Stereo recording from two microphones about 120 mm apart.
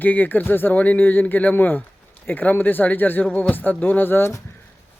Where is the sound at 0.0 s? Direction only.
15° left (ahead or behind).